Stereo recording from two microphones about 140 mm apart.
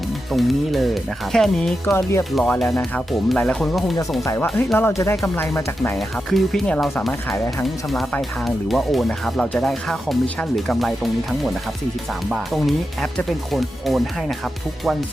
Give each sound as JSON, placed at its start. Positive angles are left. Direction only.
{"t": 0.3, "sound": "speech", "side_deg": 0}
{"t": 1.8, "sound": "speech", "side_deg": 20}
{"t": 2.3, "sound": "speech", "side_deg": 5}
{"t": 4.2, "sound": "speech", "side_deg": 20}
{"t": 6.0, "sound": "speech", "side_deg": 5}
{"t": 7.9, "sound": "speech", "side_deg": 0}